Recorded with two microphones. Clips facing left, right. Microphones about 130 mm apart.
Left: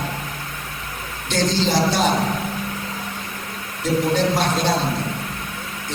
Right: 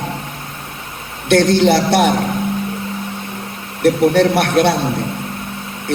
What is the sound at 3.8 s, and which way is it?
Speech, 65° right (ahead or behind).